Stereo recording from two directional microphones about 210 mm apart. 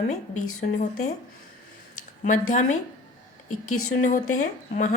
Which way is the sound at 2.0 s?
85° left.